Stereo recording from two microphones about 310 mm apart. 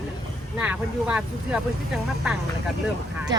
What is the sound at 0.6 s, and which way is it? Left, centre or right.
Speech, centre.